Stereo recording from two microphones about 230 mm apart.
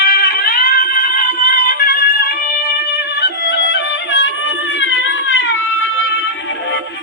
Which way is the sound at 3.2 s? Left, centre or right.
Left.